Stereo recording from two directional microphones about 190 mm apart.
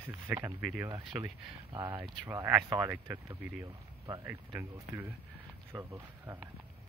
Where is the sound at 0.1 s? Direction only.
15° right (ahead or behind).